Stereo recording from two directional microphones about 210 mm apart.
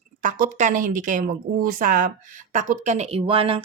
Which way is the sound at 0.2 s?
35° right (ahead or behind).